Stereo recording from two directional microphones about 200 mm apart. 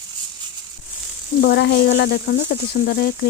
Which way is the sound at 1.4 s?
55° left (ahead or behind).